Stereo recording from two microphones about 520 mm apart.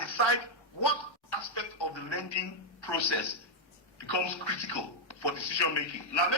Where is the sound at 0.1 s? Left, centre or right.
Left.